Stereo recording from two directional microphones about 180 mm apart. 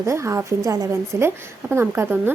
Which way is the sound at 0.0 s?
15° right (ahead or behind).